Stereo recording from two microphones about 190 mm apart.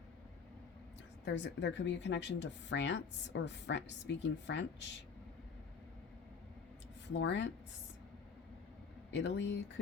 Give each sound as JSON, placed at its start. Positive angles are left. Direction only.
{"t": 1.2, "sound": "speech", "side_deg": 65}
{"t": 7.1, "sound": "speech", "side_deg": 70}
{"t": 9.1, "sound": "speech", "side_deg": 65}